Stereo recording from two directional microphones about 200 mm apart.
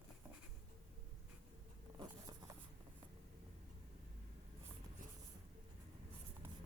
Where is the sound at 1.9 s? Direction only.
20° right (ahead or behind).